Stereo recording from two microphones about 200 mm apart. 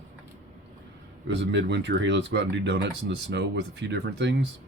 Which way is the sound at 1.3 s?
60° right (ahead or behind).